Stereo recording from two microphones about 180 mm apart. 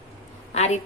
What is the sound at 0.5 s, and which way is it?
Speech, 40° left (ahead or behind).